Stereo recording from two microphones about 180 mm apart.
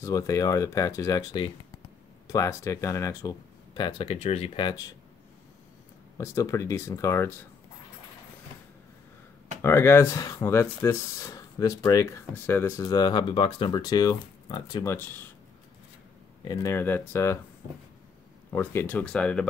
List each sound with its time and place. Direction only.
0.0 s speech: 20° left (ahead or behind)
6.1 s speech: 15° left (ahead or behind)
9.6 s speech: 15° left (ahead or behind)
15.0 s speech: 10° left (ahead or behind)
16.4 s speech: 15° left (ahead or behind)
18.5 s speech: 15° left (ahead or behind)